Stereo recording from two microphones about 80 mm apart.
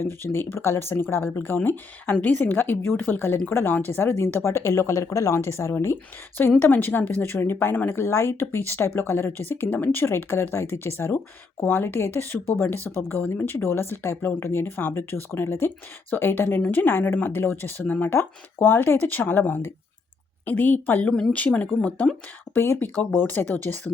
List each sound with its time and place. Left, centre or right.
0.0 s speech: left
21.1 s speech: centre
22.5 s speech: left